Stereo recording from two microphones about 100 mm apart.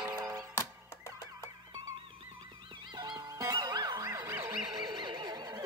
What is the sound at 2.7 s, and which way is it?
Music, 50° right (ahead or behind).